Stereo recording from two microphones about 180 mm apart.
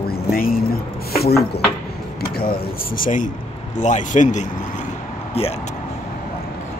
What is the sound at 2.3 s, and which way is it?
Speech, 55° left (ahead or behind).